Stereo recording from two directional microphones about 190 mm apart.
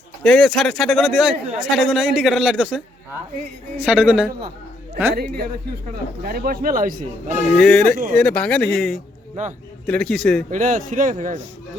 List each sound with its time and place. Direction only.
0.2 s speech: centre (ahead or behind)
3.8 s a man's voice: 5° right (ahead or behind)
5.1 s a man's voice: 55° right (ahead or behind)
7.5 s speech: 5° left (ahead or behind)
9.4 s a man's voice: 40° right (ahead or behind)
9.8 s speech: 5° left (ahead or behind)
10.5 s speech: 45° right (ahead or behind)